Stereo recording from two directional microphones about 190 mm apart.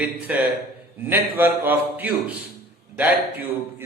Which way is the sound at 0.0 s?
10° right (ahead or behind).